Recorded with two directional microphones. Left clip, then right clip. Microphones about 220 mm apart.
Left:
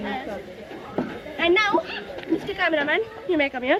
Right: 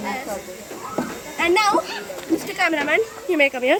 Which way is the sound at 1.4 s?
15° right (ahead or behind).